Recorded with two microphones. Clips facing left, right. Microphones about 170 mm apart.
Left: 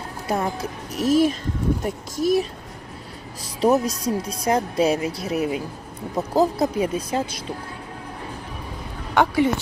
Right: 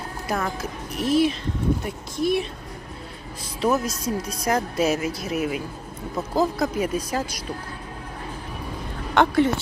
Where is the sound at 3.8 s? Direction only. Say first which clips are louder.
Left 3 dB; 30° left (ahead or behind).